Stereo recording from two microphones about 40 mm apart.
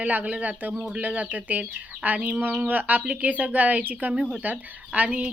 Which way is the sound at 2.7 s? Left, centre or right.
Right.